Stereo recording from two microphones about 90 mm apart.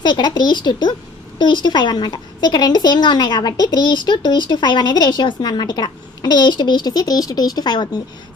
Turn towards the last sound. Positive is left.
turn(degrees=50)  # may be behind; listen again after turning